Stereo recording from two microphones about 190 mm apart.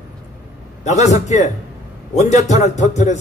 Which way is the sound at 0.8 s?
35° left (ahead or behind).